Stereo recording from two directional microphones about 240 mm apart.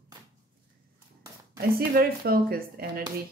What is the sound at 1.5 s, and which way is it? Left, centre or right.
Speech, right.